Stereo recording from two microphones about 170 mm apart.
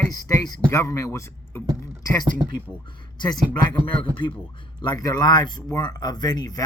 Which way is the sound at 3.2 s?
25° left (ahead or behind).